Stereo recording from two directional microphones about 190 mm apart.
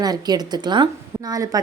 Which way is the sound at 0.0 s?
20° right (ahead or behind).